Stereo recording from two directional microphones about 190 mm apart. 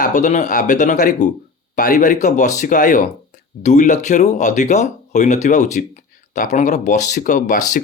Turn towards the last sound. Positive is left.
turn(degrees=40)  # may be behind; listen again after turning